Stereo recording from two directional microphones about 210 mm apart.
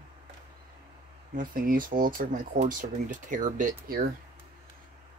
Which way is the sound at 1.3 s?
40° right (ahead or behind).